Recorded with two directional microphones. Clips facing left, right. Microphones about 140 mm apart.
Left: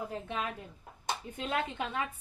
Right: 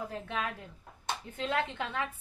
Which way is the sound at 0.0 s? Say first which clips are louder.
Even; 20° left (ahead or behind).